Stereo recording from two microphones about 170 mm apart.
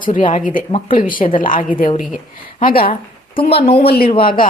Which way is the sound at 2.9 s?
35° left (ahead or behind).